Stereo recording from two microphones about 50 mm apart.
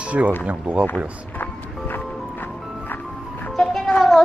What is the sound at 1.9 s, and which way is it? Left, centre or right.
Music, left.